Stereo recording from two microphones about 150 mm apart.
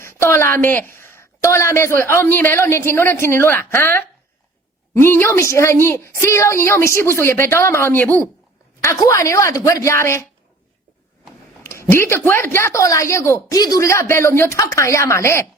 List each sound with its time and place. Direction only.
0.0 s a woman's voice: 15° left (ahead or behind)
11.6 s a woman's voice: 15° left (ahead or behind)